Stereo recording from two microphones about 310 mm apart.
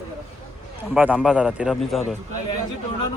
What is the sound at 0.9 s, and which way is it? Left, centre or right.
A man's voice, centre.